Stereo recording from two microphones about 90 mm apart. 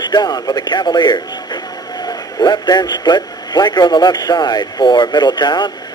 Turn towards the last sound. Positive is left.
turn(degrees=55)  # may be behind; listen again after turning